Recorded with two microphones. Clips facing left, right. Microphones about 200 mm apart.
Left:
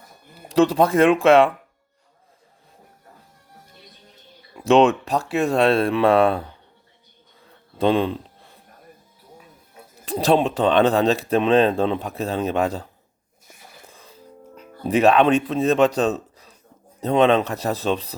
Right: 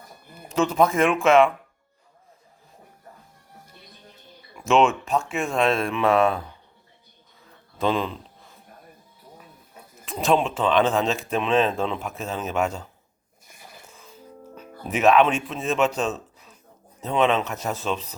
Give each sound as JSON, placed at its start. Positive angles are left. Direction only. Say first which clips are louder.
{"t": 0.3, "sound": "speech", "louder": "left 4 dB", "side_deg": 35}
{"t": 4.5, "sound": "speech", "louder": "left 4 dB", "side_deg": 35}
{"t": 7.8, "sound": "speech", "louder": "left 5 dB", "side_deg": 35}
{"t": 10.1, "sound": "speech", "louder": "left 3 dB", "side_deg": 35}
{"t": 13.8, "sound": "music", "louder": "left 2 dB", "side_deg": 35}
{"t": 14.8, "sound": "speech", "louder": "left 3 dB", "side_deg": 35}